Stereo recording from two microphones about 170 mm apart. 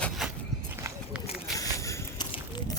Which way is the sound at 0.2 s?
5° right (ahead or behind).